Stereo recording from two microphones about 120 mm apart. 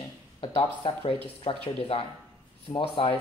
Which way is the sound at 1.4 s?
50° left (ahead or behind).